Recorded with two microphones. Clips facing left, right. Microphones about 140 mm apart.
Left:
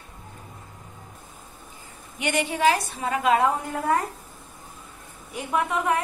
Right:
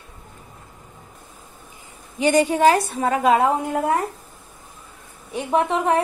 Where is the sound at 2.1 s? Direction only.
35° right (ahead or behind).